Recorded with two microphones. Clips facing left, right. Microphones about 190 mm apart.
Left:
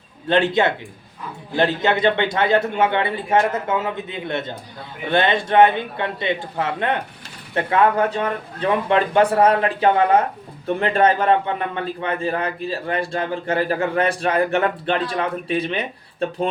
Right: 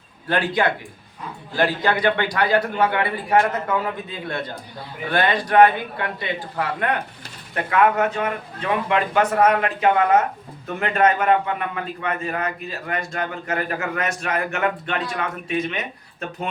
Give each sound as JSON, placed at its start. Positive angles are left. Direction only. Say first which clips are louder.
{"t": 0.3, "sound": "a man's voice", "louder": "left 3 dB", "side_deg": 25}